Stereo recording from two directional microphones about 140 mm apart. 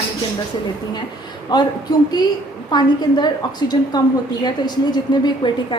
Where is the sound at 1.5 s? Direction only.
30° left (ahead or behind).